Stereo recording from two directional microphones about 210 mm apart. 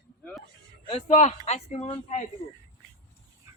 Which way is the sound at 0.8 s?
30° left (ahead or behind).